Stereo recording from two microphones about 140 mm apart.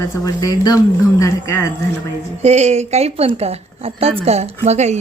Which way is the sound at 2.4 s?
50° right (ahead or behind).